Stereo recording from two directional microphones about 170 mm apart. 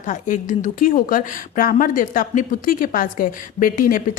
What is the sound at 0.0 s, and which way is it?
A woman's voice, 50° left (ahead or behind).